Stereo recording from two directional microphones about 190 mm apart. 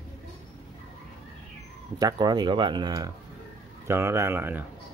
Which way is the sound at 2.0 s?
20° right (ahead or behind).